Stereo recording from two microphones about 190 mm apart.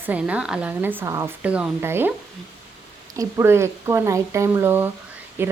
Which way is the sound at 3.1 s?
15° right (ahead or behind).